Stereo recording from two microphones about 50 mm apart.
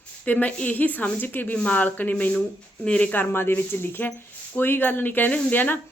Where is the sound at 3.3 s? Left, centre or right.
Left.